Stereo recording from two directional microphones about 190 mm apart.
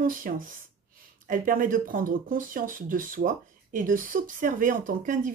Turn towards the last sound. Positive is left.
turn(degrees=-45)  # may be behind; listen again after turning